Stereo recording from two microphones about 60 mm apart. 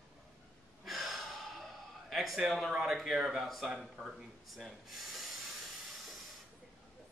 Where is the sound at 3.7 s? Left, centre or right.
Centre.